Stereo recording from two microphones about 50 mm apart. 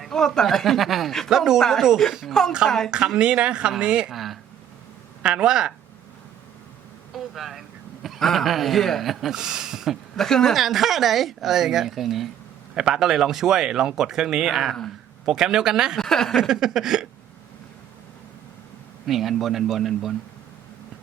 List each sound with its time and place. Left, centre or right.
0.1 s a woman's voice: centre
3.2 s speech: right
4.1 s a sound: centre
5.2 s speech: centre
7.1 s a woman's voice: centre
9.3 s speech: centre
10.2 s speech: centre
10.5 s a woman's voice: centre
16.0 s speech: centre
16.4 s speech: centre
19.0 s a woman's voice: centre